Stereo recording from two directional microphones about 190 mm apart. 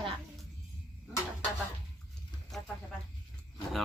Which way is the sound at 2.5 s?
Centre (ahead or behind).